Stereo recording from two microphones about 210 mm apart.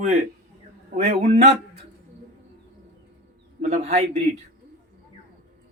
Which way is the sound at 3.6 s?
30° right (ahead or behind).